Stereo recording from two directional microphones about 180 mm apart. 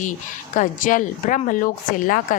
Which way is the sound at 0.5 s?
45° left (ahead or behind).